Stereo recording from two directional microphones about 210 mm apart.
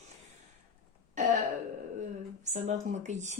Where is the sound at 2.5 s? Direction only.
35° right (ahead or behind).